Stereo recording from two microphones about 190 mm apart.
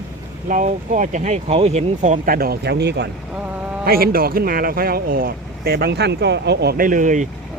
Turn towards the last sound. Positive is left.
turn(degrees=-40)  # may be behind; listen again after turning